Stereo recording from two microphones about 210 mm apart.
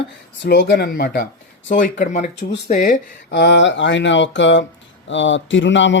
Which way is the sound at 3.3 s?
55° left (ahead or behind).